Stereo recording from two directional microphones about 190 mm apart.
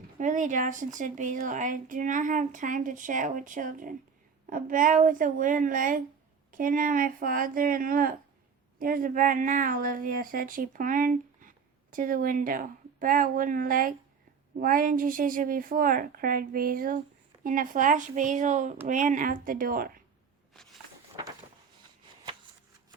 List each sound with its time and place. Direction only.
0.2 s a woman's voice: 40° right (ahead or behind)